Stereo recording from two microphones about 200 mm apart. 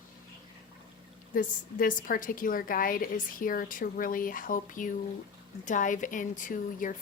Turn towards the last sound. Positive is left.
turn(degrees=40)  # may be behind; listen again after turning